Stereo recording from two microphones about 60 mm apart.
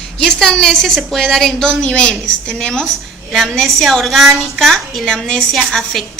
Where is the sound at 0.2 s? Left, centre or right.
Centre.